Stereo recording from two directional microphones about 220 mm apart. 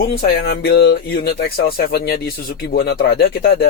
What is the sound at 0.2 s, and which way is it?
Speech, 45° left (ahead or behind).